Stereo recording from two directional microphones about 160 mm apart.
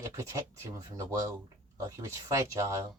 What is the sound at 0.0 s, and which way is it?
Speech, 20° right (ahead or behind).